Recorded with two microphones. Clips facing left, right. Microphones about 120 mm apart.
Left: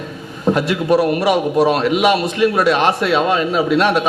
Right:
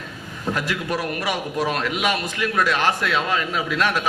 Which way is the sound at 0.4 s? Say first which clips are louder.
Left 9 dB; 25° left (ahead or behind).